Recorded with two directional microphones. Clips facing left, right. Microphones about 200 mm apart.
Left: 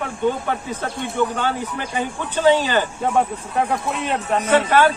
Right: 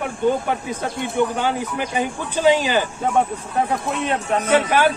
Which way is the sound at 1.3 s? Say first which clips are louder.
Right 2 dB; 10° right (ahead or behind).